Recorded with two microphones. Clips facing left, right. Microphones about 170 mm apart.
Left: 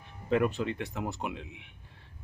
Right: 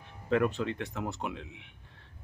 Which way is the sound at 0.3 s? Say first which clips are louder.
Even; 5° left (ahead or behind).